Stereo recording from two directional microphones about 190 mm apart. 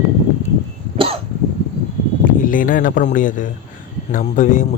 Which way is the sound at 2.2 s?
45° left (ahead or behind).